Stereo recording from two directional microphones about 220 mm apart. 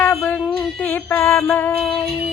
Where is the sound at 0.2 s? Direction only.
5° left (ahead or behind).